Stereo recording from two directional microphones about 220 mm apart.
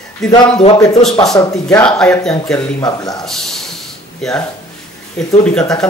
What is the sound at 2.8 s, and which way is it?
Speech, 15° left (ahead or behind).